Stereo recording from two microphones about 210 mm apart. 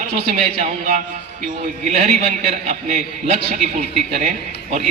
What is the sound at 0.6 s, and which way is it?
Speech, 35° right (ahead or behind).